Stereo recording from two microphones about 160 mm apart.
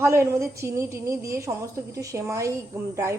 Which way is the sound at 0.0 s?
15° right (ahead or behind).